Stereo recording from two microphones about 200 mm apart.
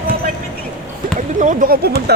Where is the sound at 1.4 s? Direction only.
40° right (ahead or behind).